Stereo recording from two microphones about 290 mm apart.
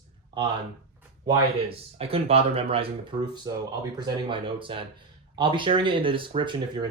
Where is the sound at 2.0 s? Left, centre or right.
Centre.